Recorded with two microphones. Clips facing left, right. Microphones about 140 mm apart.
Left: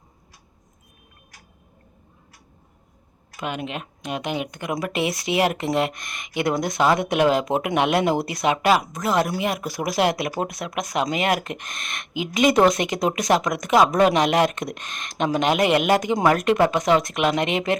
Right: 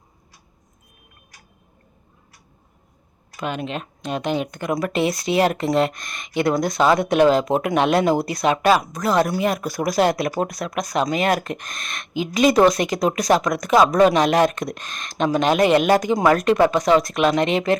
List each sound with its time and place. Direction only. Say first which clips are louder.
3.3 s speech: right 2 dB; 20° left (ahead or behind)